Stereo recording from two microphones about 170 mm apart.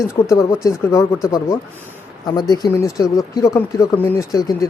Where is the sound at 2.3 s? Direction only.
25° left (ahead or behind).